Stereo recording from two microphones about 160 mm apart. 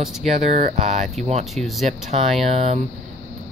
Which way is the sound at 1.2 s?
45° right (ahead or behind).